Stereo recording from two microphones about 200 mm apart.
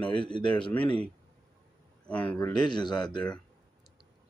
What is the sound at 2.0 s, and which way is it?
Speech, 5° left (ahead or behind).